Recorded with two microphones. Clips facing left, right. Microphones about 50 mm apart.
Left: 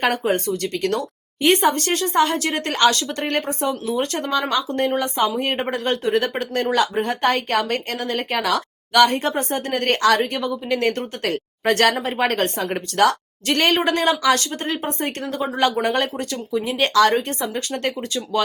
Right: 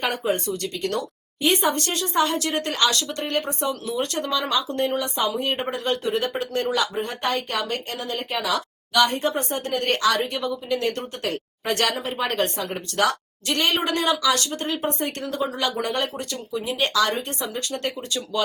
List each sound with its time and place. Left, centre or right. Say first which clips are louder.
0.0 s speech: left 4 dB; left
11.2 s speech: left 4 dB; left
13.6 s speech: left 4 dB; left